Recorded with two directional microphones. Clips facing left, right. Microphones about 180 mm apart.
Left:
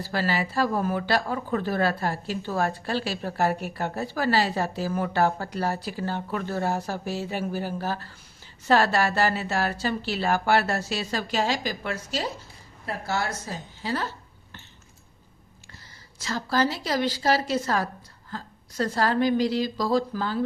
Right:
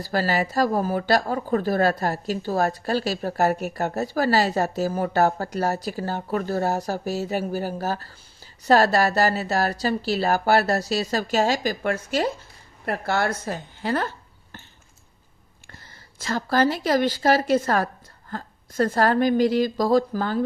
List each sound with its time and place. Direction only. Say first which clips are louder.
0.0 s a woman's voice: right 3 dB; 45° right (ahead or behind)
15.7 s a woman's voice: right 3 dB; 55° right (ahead or behind)